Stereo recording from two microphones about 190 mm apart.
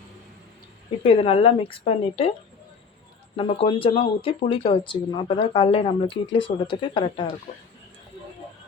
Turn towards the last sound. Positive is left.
turn(degrees=25)  # may be behind; listen again after turning